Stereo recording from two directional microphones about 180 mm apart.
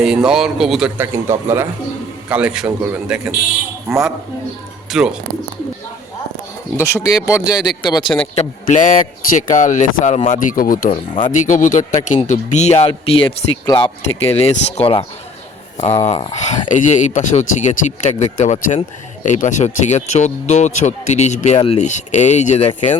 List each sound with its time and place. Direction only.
0.0 s speech: 5° right (ahead or behind)
6.7 s speech: 15° left (ahead or behind)
8.4 s a man's voice: 45° left (ahead or behind)